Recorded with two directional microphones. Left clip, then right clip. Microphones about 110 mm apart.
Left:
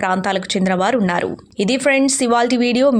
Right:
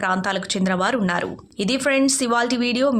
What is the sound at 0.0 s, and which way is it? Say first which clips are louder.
Speech: left 4 dB; 40° left (ahead or behind).